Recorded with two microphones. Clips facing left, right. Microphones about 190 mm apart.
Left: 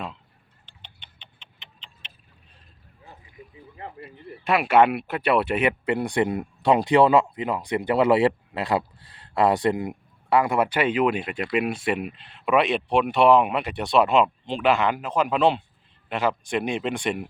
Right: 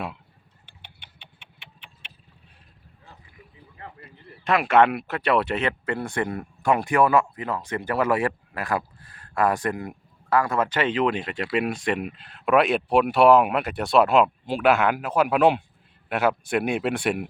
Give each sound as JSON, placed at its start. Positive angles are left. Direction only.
{"t": 0.6, "sound": "a sound", "side_deg": -10}
{"t": 3.8, "sound": "speech", "side_deg": 20}
{"t": 4.4, "sound": "speech", "side_deg": 5}